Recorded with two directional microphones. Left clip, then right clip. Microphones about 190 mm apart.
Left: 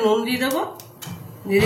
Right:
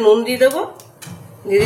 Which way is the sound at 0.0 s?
40° right (ahead or behind).